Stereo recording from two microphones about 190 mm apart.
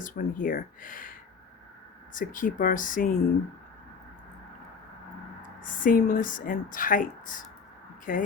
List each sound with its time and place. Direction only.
0.0 s speech: 45° left (ahead or behind)
2.1 s speech: 45° left (ahead or behind)
5.4 s speech: 45° left (ahead or behind)